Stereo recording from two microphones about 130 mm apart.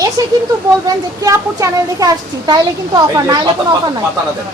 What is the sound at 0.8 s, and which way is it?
Speech, 25° right (ahead or behind).